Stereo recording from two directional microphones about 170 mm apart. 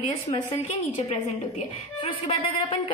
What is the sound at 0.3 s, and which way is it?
A woman's voice, 40° left (ahead or behind).